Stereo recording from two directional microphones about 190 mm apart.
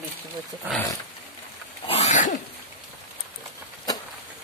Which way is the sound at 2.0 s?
40° left (ahead or behind).